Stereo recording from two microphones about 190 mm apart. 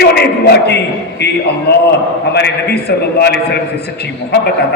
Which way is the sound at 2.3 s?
60° left (ahead or behind).